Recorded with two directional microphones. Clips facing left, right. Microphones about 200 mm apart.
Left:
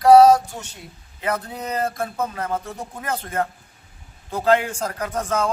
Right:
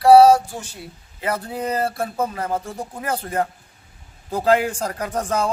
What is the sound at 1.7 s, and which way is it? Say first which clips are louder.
A woman's voice: left 1 dB; 10° right (ahead or behind).